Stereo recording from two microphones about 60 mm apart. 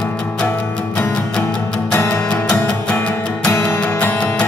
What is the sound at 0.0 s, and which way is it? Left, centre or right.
Music, centre.